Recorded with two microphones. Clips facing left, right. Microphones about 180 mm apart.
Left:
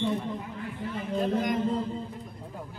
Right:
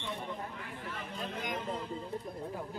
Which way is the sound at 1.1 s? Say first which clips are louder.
Left 13 dB; 40° left (ahead or behind).